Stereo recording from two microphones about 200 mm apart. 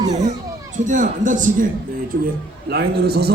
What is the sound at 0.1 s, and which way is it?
Speech, 35° right (ahead or behind).